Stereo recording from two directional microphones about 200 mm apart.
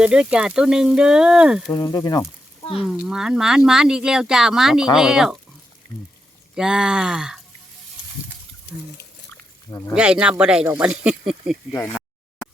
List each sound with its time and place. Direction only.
0.0 s speech: 5° right (ahead or behind)
1.7 s speech: 15° left (ahead or behind)
2.8 s speech: 5° right (ahead or behind)
6.6 s speech: 5° right (ahead or behind)
9.3 s a sound: 10° left (ahead or behind)
9.9 s speech: 5° right (ahead or behind)
11.7 s speech: 15° left (ahead or behind)